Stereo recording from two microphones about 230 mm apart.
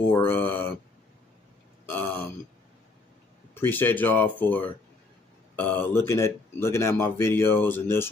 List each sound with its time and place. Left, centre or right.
0.1 s speech: centre
1.9 s a sound: centre
3.5 s speech: centre